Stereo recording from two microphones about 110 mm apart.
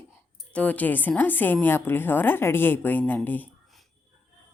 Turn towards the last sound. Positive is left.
turn(degrees=15)  # may be behind; listen again after turning